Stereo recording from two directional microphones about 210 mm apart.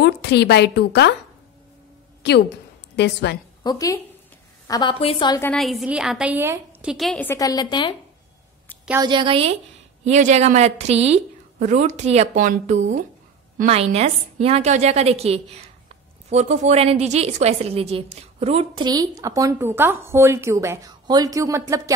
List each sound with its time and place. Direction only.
0.0 s a woman's voice: 55° left (ahead or behind)
2.2 s a woman's voice: 50° left (ahead or behind)
3.6 s a woman's voice: 15° left (ahead or behind)
5.4 s a woman's voice: 5° left (ahead or behind); by 7.9 s 20° left (ahead or behind)
9.0 s a woman's voice: 20° right (ahead or behind)